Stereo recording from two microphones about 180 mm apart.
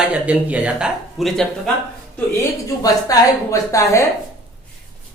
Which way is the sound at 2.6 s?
20° left (ahead or behind).